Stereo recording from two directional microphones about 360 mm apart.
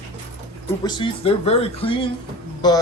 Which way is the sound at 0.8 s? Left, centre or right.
Centre.